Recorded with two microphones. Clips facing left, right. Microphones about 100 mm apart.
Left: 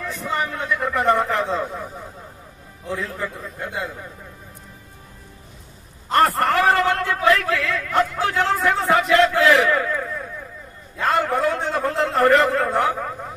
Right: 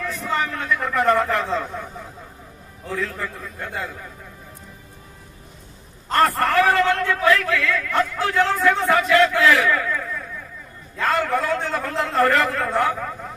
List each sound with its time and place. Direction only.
0.0 s vehicle: 25° left (ahead or behind)
0.5 s a man's voice: 20° left (ahead or behind)
2.9 s a man's voice: 30° left (ahead or behind)
6.1 s a man's voice: 25° left (ahead or behind)